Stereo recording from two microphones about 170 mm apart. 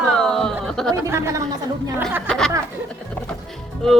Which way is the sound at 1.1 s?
15° right (ahead or behind).